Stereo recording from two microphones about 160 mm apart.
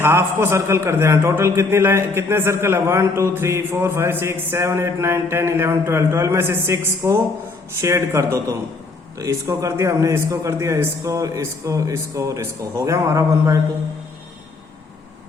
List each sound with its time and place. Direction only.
0.0 s a man's voice: 15° right (ahead or behind)